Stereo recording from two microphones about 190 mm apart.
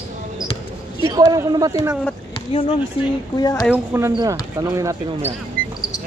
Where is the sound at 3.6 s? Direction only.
10° right (ahead or behind).